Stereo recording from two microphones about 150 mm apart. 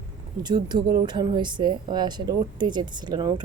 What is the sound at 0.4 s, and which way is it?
A woman's voice, 30° right (ahead or behind).